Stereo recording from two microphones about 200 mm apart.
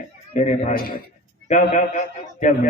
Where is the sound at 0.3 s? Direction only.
35° left (ahead or behind).